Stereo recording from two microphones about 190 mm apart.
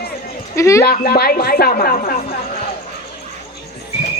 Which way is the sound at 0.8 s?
55° left (ahead or behind).